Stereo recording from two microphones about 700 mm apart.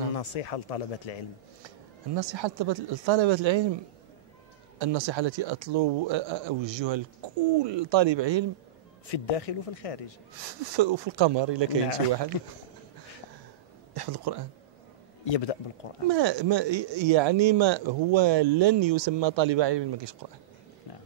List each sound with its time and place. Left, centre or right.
0.1 s speech: left
2.1 s speech: right
4.7 s speech: right
9.0 s a man's voice: left
10.8 s speech: right
13.9 s speech: right
15.2 s a man's voice: left
16.1 s speech: right